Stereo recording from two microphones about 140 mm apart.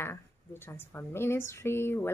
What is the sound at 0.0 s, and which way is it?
A woman's voice, 15° left (ahead or behind).